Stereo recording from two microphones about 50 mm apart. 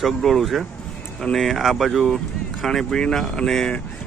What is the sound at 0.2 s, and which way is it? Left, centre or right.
Speech, centre.